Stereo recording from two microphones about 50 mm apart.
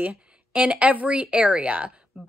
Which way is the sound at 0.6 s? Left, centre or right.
Right.